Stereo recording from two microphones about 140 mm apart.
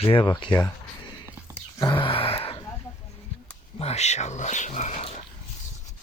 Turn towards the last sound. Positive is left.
turn(degrees=50)  # may be behind; listen again after turning